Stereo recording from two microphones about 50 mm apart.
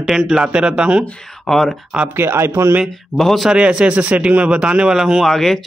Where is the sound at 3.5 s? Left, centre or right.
Centre.